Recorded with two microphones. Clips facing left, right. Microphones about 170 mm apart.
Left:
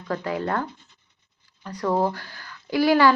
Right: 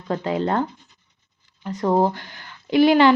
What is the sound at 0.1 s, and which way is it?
Speech, 25° right (ahead or behind).